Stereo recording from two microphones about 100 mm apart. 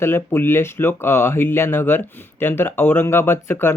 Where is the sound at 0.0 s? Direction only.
25° left (ahead or behind).